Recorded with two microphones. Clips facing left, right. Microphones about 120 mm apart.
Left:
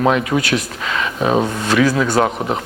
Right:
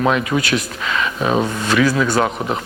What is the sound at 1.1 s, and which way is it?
A man's voice, 25° left (ahead or behind).